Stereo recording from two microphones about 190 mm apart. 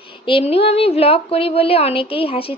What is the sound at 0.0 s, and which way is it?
A woman's voice, 25° left (ahead or behind).